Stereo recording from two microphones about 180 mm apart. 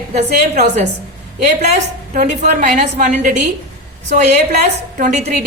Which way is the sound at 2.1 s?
45° right (ahead or behind).